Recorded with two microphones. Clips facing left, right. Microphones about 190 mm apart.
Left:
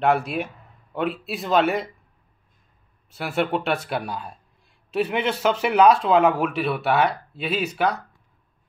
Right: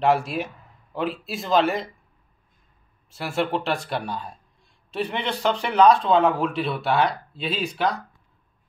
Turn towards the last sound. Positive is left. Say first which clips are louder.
# left 3 dB
turn(degrees=70)  # may be behind; listen again after turning